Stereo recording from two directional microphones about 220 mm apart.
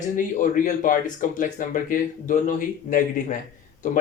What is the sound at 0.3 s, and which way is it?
Speech, 35° left (ahead or behind).